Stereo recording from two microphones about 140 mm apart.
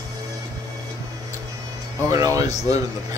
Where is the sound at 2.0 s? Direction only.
20° right (ahead or behind).